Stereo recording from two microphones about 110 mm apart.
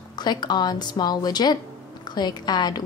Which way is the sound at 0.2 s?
40° left (ahead or behind).